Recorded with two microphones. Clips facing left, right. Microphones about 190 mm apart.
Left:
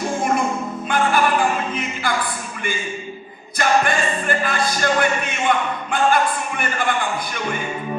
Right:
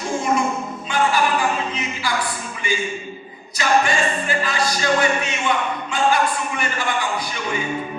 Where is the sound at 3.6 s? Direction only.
55° left (ahead or behind).